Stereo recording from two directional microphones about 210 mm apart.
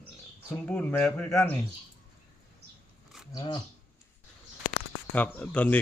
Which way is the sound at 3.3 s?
20° left (ahead or behind).